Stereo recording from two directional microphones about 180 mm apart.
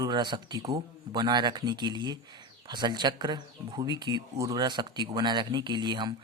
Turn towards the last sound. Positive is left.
turn(degrees=-25)  # may be behind; listen again after turning